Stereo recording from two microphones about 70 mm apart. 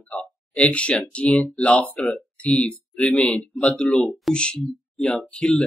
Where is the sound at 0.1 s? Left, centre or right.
Centre.